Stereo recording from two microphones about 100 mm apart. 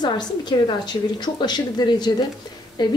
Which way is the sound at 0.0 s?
45° left (ahead or behind).